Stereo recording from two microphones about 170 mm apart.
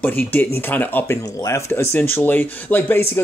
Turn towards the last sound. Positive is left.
turn(degrees=10)  # may be behind; listen again after turning